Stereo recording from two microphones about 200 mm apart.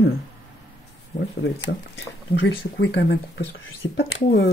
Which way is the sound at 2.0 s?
60° left (ahead or behind).